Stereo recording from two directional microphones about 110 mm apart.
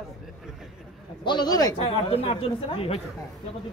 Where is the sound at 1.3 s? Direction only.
40° left (ahead or behind).